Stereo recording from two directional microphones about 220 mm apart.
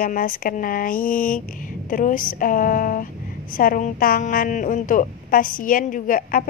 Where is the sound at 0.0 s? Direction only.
40° left (ahead or behind).